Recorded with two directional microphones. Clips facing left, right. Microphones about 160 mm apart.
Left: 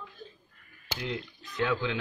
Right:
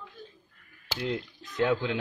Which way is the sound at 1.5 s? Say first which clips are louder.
Right 3 dB; 45° right (ahead or behind).